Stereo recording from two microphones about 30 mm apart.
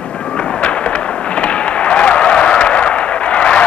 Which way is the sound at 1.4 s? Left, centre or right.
Left.